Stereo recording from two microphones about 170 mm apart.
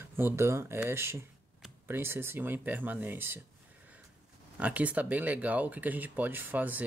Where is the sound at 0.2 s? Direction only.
15° right (ahead or behind).